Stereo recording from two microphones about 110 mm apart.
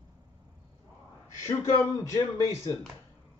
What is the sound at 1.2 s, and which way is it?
Speech, 30° left (ahead or behind).